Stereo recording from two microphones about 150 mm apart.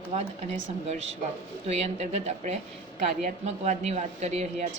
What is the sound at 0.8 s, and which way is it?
A woman's voice, 45° right (ahead or behind).